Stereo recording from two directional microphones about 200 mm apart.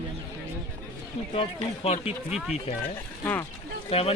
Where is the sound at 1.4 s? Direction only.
30° left (ahead or behind).